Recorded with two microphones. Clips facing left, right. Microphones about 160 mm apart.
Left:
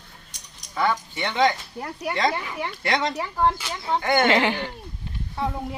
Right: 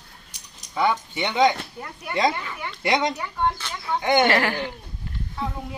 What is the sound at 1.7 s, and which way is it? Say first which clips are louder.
Speech: left 4 dB; 30° left (ahead or behind).